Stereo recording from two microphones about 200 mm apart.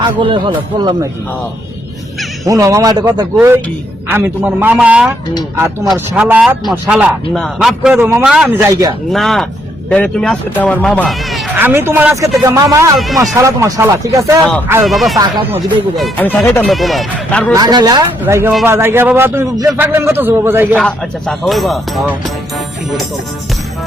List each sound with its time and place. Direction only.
0.0 s speech: 25° right (ahead or behind)
2.5 s a man's voice: 15° right (ahead or behind)
8.5 s a man's voice: 15° right (ahead or behind)
9.1 s speech: centre (ahead or behind)
11.5 s a man's voice: 10° right (ahead or behind)
14.8 s speech: centre (ahead or behind)
17.5 s a man's voice: 20° right (ahead or behind)
20.7 s speech: centre (ahead or behind)